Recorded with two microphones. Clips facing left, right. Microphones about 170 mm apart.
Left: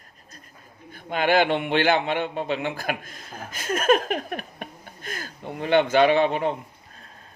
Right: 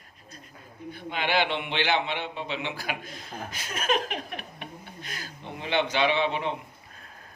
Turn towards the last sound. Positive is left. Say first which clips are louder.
# left 6 dB
turn(degrees=45)  # may be behind; listen again after turning